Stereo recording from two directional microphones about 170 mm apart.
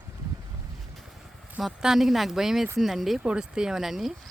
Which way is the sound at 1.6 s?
Centre (ahead or behind).